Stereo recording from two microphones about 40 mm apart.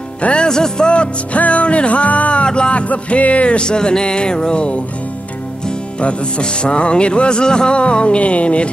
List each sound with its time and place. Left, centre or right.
0.2 s music: left